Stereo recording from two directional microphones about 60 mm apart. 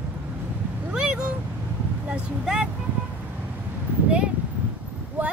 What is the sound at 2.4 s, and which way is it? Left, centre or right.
Speech, centre.